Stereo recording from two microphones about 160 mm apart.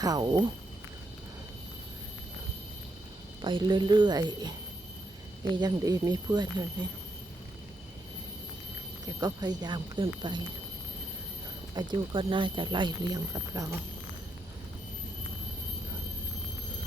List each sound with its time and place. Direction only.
0.0 s speech: 25° right (ahead or behind)
3.4 s speech: 30° right (ahead or behind)
5.5 s speech: 25° right (ahead or behind)
9.0 s speech: 25° right (ahead or behind)
11.7 s speech: 25° right (ahead or behind)